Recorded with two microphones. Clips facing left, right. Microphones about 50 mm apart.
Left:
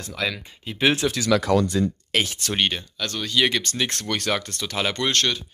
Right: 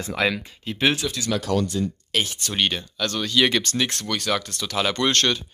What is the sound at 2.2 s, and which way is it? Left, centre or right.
Speech, left.